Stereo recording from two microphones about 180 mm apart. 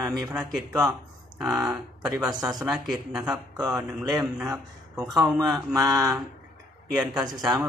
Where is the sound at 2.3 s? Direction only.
20° right (ahead or behind).